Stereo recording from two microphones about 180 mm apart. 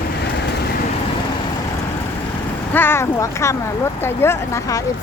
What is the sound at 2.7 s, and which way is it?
Speech, 10° left (ahead or behind).